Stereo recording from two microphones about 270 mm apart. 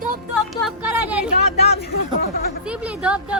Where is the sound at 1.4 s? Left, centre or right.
Left.